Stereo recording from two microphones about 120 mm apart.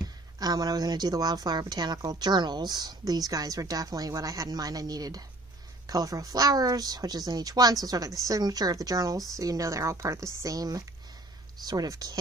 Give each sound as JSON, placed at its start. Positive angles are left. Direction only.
{"t": 0.4, "sound": "a woman's voice", "side_deg": -35}